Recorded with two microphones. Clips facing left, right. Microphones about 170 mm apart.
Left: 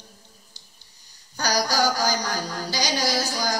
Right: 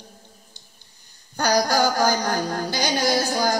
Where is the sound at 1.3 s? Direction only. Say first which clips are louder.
Right 4 dB; 55° right (ahead or behind).